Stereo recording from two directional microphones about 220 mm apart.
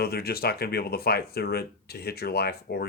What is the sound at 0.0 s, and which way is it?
Speech, 45° left (ahead or behind).